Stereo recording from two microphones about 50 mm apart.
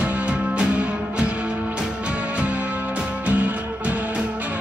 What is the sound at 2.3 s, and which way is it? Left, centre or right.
Music, right.